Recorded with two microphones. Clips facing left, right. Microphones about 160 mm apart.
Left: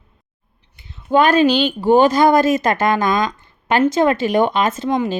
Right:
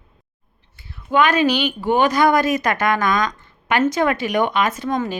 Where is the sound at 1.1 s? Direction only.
35° left (ahead or behind).